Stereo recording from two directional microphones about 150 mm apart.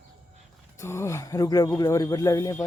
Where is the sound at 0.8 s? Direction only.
20° left (ahead or behind).